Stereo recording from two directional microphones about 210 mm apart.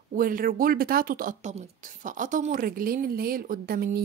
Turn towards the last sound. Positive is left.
turn(degrees=-45)  # may be behind; listen again after turning